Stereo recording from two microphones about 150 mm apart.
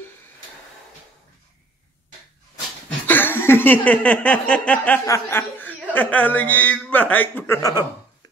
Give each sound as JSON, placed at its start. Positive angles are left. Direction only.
{"t": 3.1, "sound": "a sound", "side_deg": 15}
{"t": 5.0, "sound": "speech", "side_deg": 20}
{"t": 5.9, "sound": "a man's voice", "side_deg": 10}